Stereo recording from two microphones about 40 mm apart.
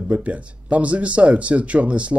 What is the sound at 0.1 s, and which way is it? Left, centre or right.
Speech, right.